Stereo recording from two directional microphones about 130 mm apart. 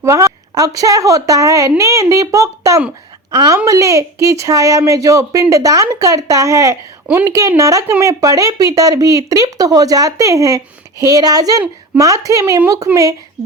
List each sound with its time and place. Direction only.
0.0 s speech: 25° right (ahead or behind)